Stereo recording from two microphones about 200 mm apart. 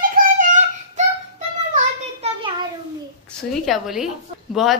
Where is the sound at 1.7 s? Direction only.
30° right (ahead or behind).